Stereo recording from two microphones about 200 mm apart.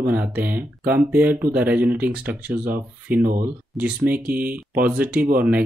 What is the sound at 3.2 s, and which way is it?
Speech, 45° right (ahead or behind).